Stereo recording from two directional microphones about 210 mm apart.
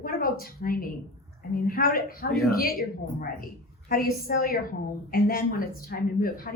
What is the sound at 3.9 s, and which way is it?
Speech, 45° left (ahead or behind).